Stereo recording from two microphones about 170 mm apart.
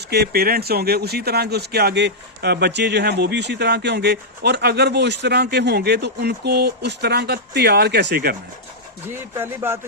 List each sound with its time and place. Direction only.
0.1 s speech: 70° right (ahead or behind)
9.3 s speech: 15° right (ahead or behind)